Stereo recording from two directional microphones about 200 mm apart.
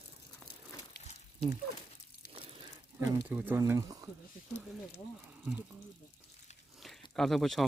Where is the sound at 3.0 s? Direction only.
10° right (ahead or behind).